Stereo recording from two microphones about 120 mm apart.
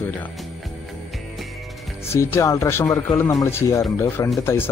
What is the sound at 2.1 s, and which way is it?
Speech, 25° left (ahead or behind).